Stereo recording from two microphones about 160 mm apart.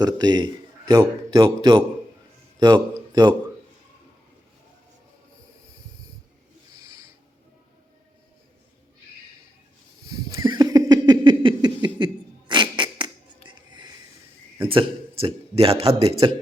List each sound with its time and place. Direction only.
0.0 s speech: 25° right (ahead or behind)
10.3 s a sound: 25° right (ahead or behind)
14.7 s a man's voice: 35° right (ahead or behind)